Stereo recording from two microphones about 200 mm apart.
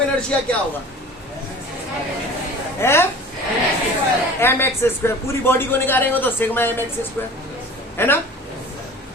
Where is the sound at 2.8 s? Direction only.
10° left (ahead or behind).